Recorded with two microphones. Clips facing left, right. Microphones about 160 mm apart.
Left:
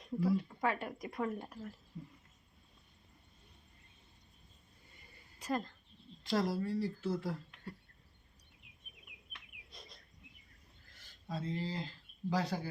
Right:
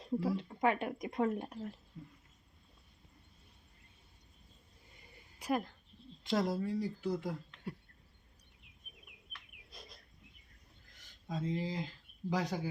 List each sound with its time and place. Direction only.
0.0 s speech: 25° right (ahead or behind)
5.4 s speech: 10° right (ahead or behind)
9.6 s bird: centre (ahead or behind)
11.3 s speech: 15° right (ahead or behind)